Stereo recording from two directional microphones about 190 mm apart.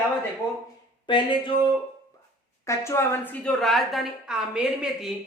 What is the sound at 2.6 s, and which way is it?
A woman's voice, 15° left (ahead or behind).